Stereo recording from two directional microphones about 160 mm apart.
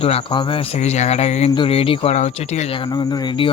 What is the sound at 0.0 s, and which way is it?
Speech, 40° left (ahead or behind).